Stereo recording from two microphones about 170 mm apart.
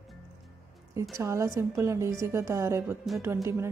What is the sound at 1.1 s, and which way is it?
A woman's voice, 15° right (ahead or behind).